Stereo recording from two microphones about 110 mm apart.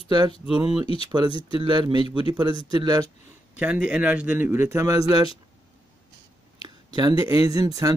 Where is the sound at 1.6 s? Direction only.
40° right (ahead or behind).